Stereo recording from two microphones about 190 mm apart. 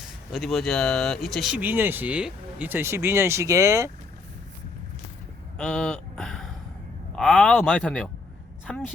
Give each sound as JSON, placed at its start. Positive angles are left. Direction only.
{"t": 0.3, "sound": "speech", "side_deg": 0}
{"t": 5.5, "sound": "speech", "side_deg": 0}